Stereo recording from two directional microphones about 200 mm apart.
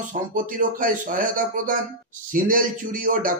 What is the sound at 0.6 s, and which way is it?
A man's voice, 45° right (ahead or behind).